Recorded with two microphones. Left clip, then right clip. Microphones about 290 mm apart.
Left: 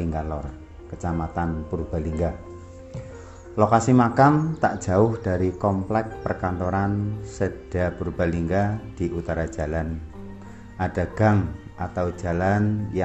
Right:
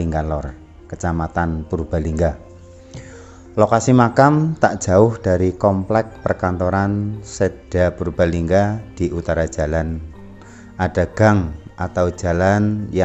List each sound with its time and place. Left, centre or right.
0.0 s speech: right
3.5 s speech: right